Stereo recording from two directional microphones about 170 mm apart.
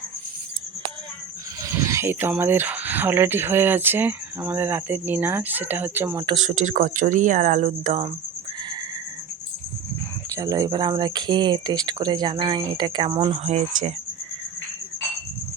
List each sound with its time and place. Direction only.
1.6 s speech: 15° right (ahead or behind)
6.3 s speech: 45° right (ahead or behind)
10.3 s speech: 20° right (ahead or behind); by 13.9 s 40° right (ahead or behind)